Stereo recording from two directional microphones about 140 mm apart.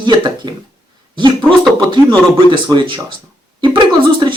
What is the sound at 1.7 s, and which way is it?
Speech, 30° right (ahead or behind).